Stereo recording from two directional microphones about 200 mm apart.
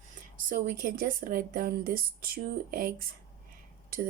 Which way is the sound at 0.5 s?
45° right (ahead or behind).